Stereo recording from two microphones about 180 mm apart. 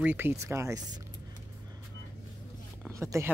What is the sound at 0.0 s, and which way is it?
Speech, 10° right (ahead or behind).